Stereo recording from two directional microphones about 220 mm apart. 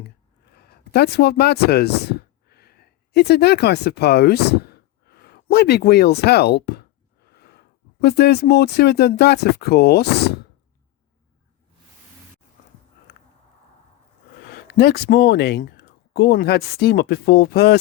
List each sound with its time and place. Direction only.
0.0 s speech: 45° left (ahead or behind)
7.3 s a sound: 45° left (ahead or behind)
8.0 s speech: 50° left (ahead or behind)
14.5 s speech: 45° left (ahead or behind)